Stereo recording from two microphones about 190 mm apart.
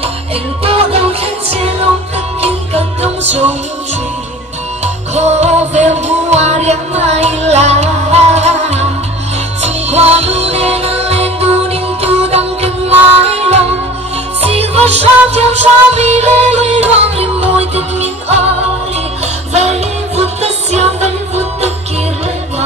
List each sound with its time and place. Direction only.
0.7 s music: 30° right (ahead or behind)
4.8 s music: 35° right (ahead or behind)
19.5 s music: 35° right (ahead or behind)